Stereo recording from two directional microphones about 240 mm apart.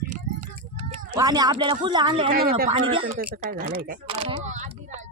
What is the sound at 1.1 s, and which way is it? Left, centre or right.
A man's voice, centre.